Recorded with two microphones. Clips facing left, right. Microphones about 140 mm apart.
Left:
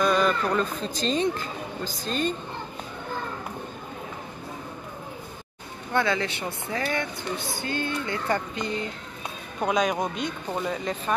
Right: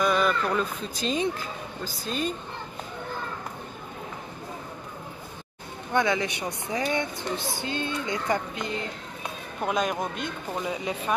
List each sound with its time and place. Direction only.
0.0 s speech: 5° right (ahead or behind)
5.9 s speech: 15° right (ahead or behind)
9.6 s speech: centre (ahead or behind)